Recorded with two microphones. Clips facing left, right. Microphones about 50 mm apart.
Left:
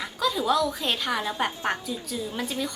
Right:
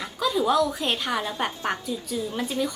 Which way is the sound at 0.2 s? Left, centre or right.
Centre.